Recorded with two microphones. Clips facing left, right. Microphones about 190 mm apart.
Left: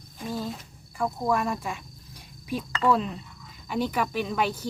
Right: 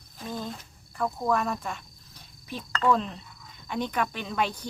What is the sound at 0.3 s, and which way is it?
Cricket, 5° left (ahead or behind).